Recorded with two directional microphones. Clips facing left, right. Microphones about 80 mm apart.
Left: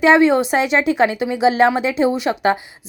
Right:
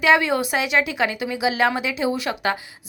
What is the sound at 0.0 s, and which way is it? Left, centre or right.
Speech, left.